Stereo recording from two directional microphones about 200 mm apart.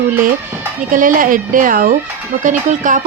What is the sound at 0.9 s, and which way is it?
Speech, 40° right (ahead or behind).